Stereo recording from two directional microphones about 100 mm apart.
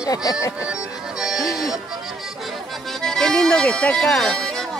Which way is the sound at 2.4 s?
Centre (ahead or behind).